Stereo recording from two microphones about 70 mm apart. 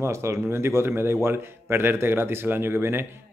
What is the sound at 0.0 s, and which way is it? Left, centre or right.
A man's voice, right.